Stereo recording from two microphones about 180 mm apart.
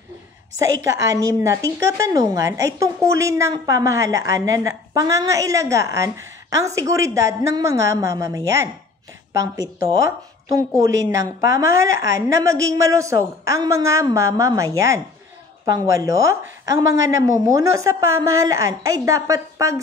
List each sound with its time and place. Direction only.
0.8 s a woman's voice: 15° right (ahead or behind)